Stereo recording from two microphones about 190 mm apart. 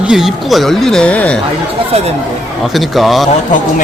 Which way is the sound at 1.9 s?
30° right (ahead or behind).